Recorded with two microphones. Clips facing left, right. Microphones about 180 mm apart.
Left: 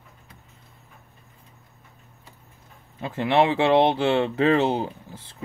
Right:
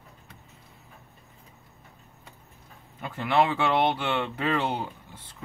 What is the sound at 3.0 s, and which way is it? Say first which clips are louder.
Speech: left 4 dB; 25° left (ahead or behind).